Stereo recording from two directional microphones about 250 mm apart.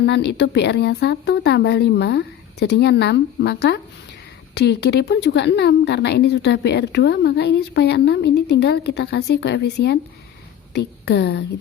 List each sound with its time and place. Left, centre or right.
0.0 s a woman's voice: left